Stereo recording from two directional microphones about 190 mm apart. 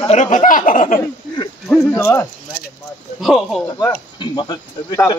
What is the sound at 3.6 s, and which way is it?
Speech, 20° left (ahead or behind).